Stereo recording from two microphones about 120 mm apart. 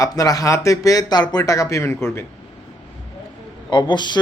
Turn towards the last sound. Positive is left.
turn(degrees=40)  # may be behind; listen again after turning